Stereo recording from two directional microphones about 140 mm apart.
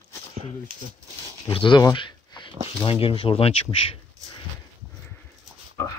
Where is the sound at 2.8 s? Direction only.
40° left (ahead or behind).